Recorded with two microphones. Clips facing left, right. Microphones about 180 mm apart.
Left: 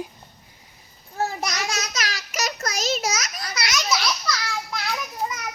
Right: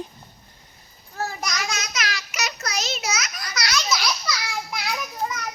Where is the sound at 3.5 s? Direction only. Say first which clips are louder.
Right 1 dB; 25° left (ahead or behind).